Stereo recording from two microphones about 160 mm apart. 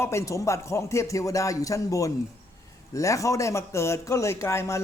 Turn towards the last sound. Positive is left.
turn(degrees=20)  # may be behind; listen again after turning